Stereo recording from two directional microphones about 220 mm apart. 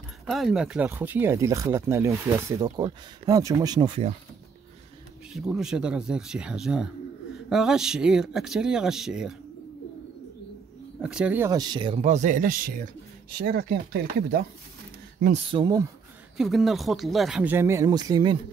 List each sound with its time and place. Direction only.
0.3 s speech: centre (ahead or behind); by 4.1 s 20° right (ahead or behind)
5.3 s speech: centre (ahead or behind)
11.0 s speech: 5° right (ahead or behind); by 14.4 s 45° right (ahead or behind)
15.3 s speech: 20° right (ahead or behind)
16.3 s speech: centre (ahead or behind); by 18.4 s 20° right (ahead or behind)